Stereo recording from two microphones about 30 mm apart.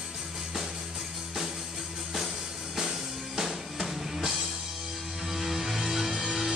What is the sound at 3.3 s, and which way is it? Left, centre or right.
Music, centre.